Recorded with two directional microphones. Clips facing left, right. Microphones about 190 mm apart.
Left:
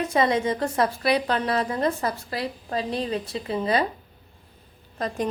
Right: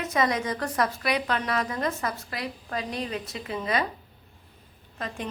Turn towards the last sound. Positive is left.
turn(degrees=35)  # may be behind; listen again after turning